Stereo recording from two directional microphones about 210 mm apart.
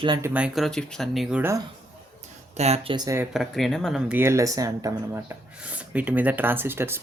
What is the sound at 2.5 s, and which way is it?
Speech, 30° right (ahead or behind).